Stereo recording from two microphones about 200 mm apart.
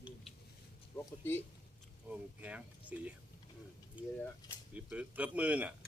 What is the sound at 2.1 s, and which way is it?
Speech, 5° right (ahead or behind).